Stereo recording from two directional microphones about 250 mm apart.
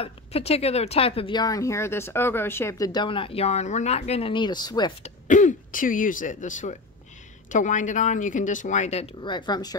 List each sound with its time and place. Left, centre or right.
0.0 s speech: left
5.3 s speech: left; by 9.8 s centre